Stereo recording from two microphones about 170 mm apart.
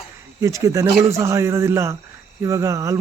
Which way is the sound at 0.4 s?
20° right (ahead or behind).